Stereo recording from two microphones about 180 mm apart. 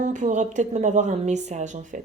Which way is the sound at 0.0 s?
45° right (ahead or behind).